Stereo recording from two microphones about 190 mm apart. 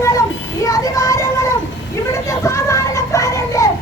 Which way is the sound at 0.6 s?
20° left (ahead or behind).